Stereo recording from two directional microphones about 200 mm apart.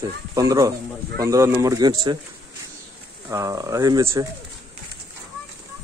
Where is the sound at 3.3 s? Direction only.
15° right (ahead or behind).